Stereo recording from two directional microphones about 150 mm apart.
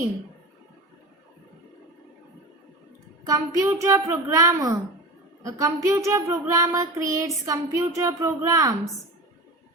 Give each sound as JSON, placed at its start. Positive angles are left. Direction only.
{"t": 3.2, "sound": "child singing", "side_deg": -20}